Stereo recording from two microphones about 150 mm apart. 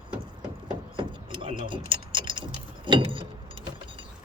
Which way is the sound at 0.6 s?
30° right (ahead or behind).